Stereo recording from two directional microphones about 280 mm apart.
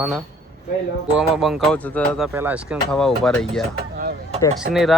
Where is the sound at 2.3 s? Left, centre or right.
Centre.